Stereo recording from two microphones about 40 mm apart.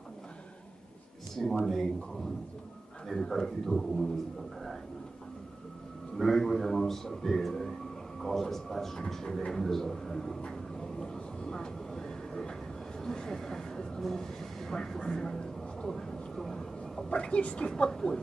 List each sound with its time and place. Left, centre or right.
1.4 s a man's voice: centre
6.1 s a man's voice: centre
10.5 s train: centre
13.0 s speech: centre
17.1 s a woman's voice: left